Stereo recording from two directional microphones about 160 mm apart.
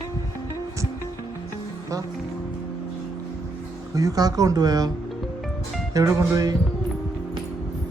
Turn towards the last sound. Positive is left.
turn(degrees=-20)  # may be behind; listen again after turning